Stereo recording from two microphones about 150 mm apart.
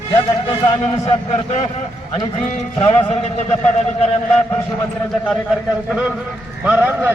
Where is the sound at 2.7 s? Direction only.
25° left (ahead or behind).